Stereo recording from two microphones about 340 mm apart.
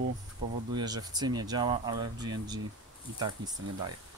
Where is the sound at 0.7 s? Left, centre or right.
Centre.